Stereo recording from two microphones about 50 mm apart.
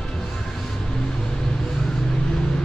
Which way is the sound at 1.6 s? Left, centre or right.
Centre.